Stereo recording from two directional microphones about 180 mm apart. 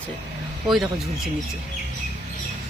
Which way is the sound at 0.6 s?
Centre (ahead or behind).